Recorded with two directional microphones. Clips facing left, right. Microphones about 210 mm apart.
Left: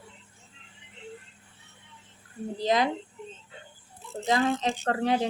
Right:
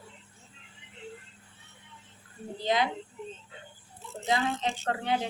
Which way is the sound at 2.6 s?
40° left (ahead or behind).